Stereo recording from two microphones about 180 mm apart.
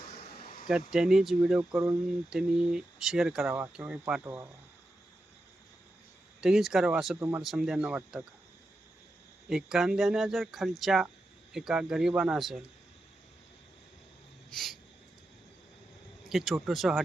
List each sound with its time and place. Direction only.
0.3 s a sound: 55° left (ahead or behind)
0.7 s speech: 5° right (ahead or behind)
6.4 s speech: centre (ahead or behind)
9.5 s speech: 5° right (ahead or behind)
14.5 s speech: centre (ahead or behind)
16.2 s speech: centre (ahead or behind)